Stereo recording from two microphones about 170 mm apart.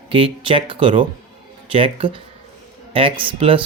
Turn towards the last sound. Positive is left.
turn(degrees=-30)  # may be behind; listen again after turning